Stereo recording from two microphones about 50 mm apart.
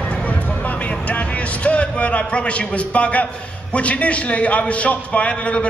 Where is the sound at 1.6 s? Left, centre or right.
Left.